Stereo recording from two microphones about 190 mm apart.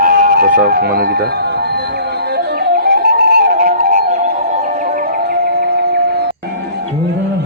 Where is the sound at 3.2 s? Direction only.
55° right (ahead or behind).